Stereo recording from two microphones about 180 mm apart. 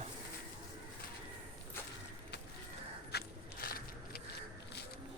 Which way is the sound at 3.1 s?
60° left (ahead or behind).